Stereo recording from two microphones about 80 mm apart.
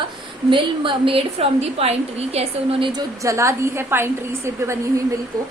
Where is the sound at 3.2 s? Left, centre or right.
Right.